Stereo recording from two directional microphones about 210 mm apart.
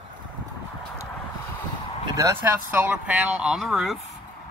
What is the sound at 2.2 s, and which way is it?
Speech, 10° right (ahead or behind).